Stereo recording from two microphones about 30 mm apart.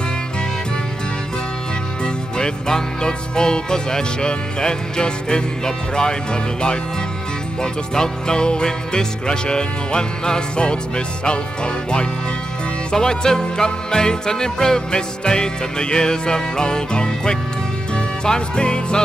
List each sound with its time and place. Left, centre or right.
2.0 s music: left